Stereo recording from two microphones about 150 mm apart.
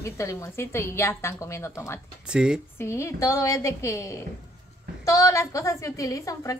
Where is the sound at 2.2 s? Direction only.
5° right (ahead or behind).